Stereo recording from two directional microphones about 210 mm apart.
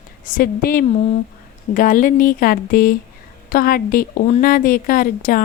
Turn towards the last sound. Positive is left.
turn(degrees=40)  # may be behind; listen again after turning